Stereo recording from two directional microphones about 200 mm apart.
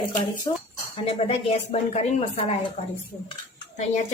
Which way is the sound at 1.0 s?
30° left (ahead or behind).